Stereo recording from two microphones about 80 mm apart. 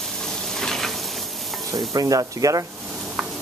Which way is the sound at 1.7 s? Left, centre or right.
Right.